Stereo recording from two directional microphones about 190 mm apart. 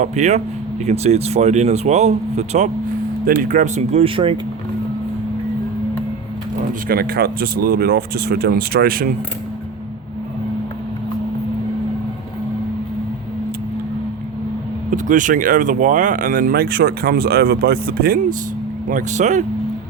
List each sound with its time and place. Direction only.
0.0 s speech: 35° right (ahead or behind)
6.8 s speech: 50° right (ahead or behind)
14.8 s speech: 40° right (ahead or behind)
18.9 s speech: 40° right (ahead or behind)